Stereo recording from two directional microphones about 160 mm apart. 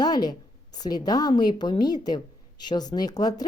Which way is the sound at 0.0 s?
25° left (ahead or behind).